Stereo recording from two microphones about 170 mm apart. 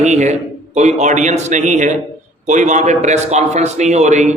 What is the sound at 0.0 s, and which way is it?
A man's voice, 45° right (ahead or behind).